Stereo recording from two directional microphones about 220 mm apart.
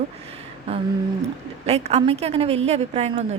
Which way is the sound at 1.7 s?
30° right (ahead or behind).